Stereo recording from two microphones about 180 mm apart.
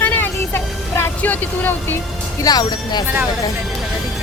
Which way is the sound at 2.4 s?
20° left (ahead or behind).